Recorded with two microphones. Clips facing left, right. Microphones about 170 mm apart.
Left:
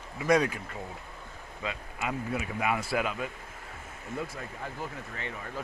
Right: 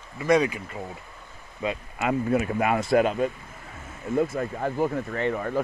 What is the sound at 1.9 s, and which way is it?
Speech, 55° right (ahead or behind).